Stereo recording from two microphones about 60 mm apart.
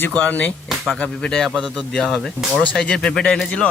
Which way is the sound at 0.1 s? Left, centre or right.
Left.